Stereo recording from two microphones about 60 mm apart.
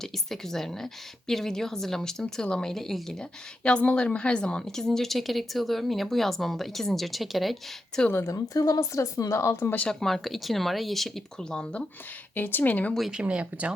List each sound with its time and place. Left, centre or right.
0.0 s a woman's voice: centre
8.2 s speech: left
9.3 s speech: left
9.9 s speech: centre
11.3 s a woman's voice: centre
12.3 s speech: left
13.1 s speech: centre